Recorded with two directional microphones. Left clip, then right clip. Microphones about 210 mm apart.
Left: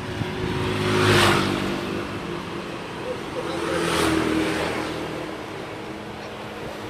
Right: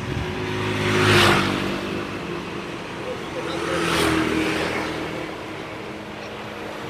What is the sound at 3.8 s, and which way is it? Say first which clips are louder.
Vehicle: right 2 dB; 35° right (ahead or behind).